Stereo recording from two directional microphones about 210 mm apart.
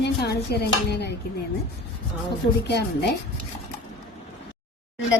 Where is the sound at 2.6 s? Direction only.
55° left (ahead or behind).